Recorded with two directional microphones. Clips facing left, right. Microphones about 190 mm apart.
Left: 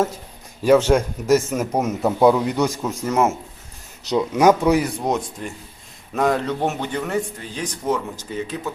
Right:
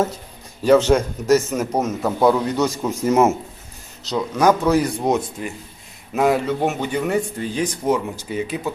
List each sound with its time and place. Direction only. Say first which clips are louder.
0.6 s a man's voice: right 1 dB; 10° left (ahead or behind)
3.0 s speech: right 4 dB; 25° right (ahead or behind)
4.0 s a man's voice: left 2 dB; 20° left (ahead or behind)
4.8 s a man's voice: right 3 dB; centre (ahead or behind)